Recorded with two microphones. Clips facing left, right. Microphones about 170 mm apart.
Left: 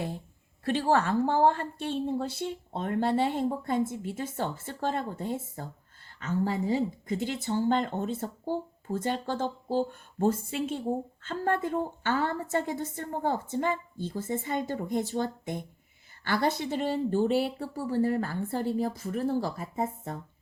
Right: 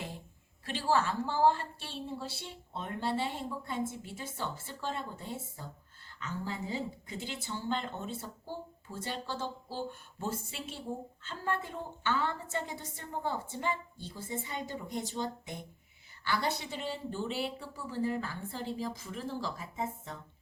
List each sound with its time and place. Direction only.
0.6 s speech: 50° left (ahead or behind)